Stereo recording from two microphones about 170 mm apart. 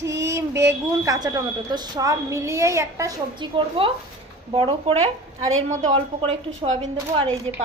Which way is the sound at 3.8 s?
35° right (ahead or behind).